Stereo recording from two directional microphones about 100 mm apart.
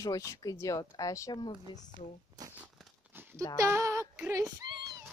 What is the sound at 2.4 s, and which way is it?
Crumpling, 40° right (ahead or behind).